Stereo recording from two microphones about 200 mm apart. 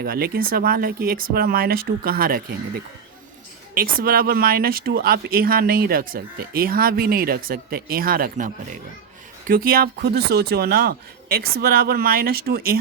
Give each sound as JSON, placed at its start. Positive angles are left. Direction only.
{"t": 0.0, "sound": "speech", "side_deg": -50}